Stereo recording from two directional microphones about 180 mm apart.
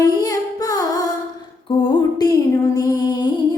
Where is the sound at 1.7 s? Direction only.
30° left (ahead or behind).